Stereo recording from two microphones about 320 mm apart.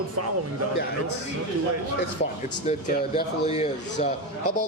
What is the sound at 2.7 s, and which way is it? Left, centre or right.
Speech, left.